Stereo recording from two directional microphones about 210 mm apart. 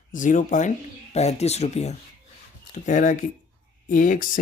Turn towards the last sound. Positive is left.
turn(degrees=40)  # may be behind; listen again after turning